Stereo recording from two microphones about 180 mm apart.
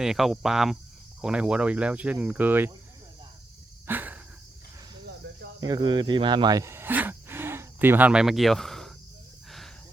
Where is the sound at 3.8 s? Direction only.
10° right (ahead or behind).